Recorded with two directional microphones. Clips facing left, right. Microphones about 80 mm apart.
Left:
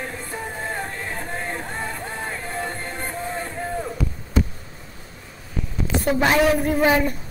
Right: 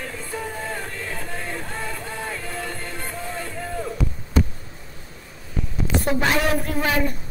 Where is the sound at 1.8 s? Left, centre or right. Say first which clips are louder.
Left 1 dB; left.